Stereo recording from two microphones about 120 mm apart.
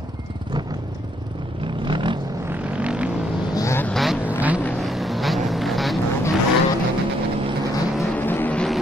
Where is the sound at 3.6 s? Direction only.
25° left (ahead or behind).